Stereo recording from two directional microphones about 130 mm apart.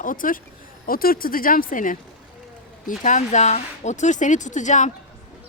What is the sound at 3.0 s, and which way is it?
A woman's voice, 70° left (ahead or behind).